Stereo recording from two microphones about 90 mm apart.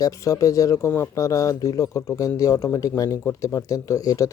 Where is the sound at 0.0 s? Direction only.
40° left (ahead or behind).